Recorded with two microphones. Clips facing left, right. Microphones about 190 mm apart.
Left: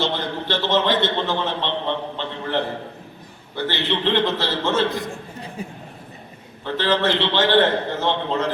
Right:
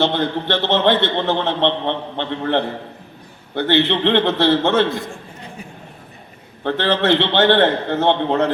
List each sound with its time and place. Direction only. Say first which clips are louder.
0.0 s a man's voice: right 6 dB; 60° right (ahead or behind)
6.6 s a man's voice: right 3 dB; 60° right (ahead or behind)